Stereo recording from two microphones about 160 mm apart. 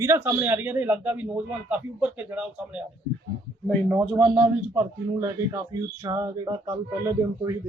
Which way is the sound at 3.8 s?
Centre (ahead or behind).